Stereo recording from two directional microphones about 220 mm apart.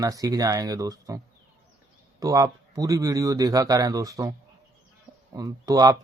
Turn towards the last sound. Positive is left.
turn(degrees=-15)  # may be behind; listen again after turning